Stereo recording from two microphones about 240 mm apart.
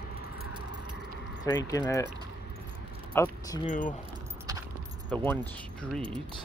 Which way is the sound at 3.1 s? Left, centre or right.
Centre.